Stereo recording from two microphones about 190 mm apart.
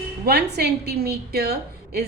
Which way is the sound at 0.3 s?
60° right (ahead or behind).